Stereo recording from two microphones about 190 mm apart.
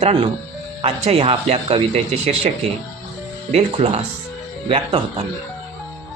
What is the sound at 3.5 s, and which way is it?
Speech, 35° right (ahead or behind).